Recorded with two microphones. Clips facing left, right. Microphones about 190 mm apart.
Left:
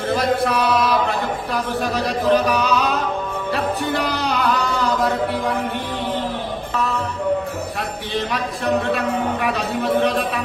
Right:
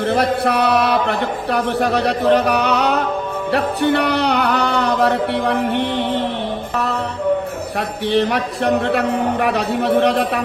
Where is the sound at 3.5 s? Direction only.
65° right (ahead or behind).